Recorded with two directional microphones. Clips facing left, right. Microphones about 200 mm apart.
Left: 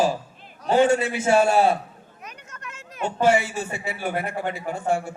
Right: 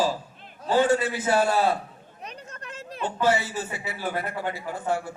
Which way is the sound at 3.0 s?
25° left (ahead or behind).